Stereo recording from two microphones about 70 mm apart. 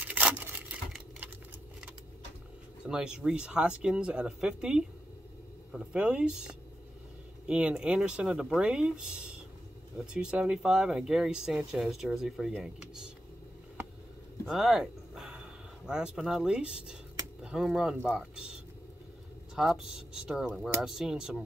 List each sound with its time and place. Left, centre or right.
0.0 s a sound: centre
2.8 s speech: centre
12.6 s computer keyboard: centre
14.4 s speech: centre